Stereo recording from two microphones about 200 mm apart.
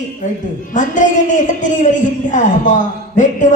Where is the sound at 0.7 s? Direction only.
40° left (ahead or behind).